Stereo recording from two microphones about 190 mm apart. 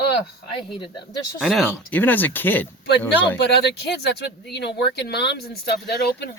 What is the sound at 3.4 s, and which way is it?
Speech, 60° left (ahead or behind).